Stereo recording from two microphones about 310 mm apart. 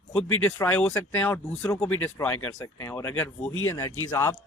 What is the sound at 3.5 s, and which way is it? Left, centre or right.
Speech, left.